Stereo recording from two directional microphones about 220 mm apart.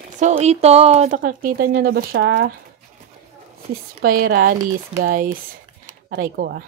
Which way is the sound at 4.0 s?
40° right (ahead or behind).